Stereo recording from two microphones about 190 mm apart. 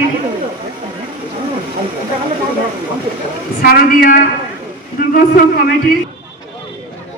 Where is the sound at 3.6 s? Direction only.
50° left (ahead or behind).